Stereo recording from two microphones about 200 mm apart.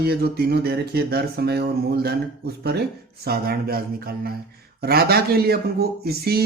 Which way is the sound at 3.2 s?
50° right (ahead or behind).